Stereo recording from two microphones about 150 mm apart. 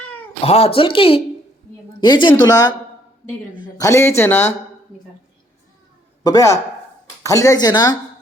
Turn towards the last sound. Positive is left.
turn(degrees=25)  # may be behind; listen again after turning